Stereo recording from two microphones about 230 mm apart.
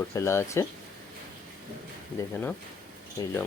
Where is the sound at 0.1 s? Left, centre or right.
Centre.